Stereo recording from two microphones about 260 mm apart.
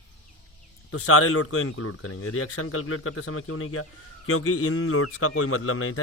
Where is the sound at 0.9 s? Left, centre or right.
Left.